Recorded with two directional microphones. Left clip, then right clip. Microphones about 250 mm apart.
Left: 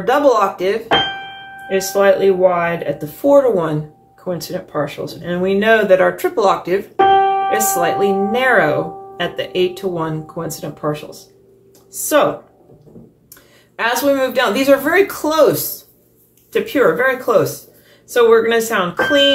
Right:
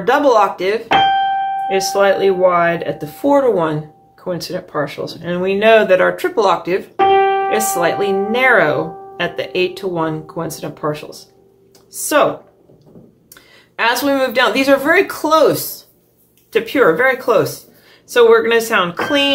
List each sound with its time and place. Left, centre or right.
0.0 s speech: centre
13.7 s speech: right